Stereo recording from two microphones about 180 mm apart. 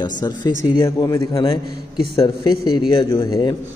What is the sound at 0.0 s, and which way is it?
A man's voice, 25° left (ahead or behind).